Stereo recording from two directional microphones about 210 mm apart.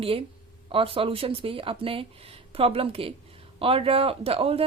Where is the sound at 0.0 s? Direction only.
25° right (ahead or behind).